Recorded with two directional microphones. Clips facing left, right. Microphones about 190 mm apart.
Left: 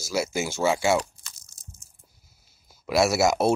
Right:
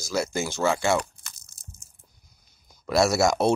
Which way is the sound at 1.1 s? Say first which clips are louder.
Right 2 dB; 60° right (ahead or behind).